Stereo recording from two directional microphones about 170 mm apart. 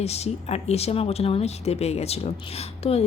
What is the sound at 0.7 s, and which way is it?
Speech, 35° left (ahead or behind).